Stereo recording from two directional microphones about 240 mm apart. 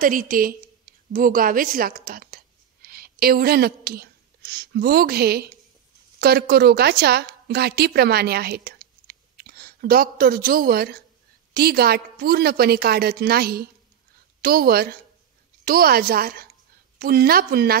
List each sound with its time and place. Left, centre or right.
0.0 s a woman's voice: right